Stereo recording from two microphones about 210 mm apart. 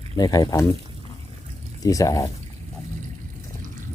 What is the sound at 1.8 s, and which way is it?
Speech, 15° left (ahead or behind).